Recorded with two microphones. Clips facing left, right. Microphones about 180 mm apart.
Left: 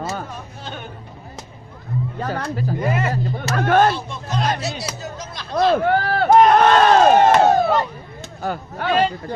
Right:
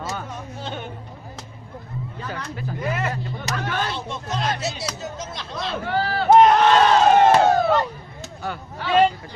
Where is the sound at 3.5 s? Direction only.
50° left (ahead or behind).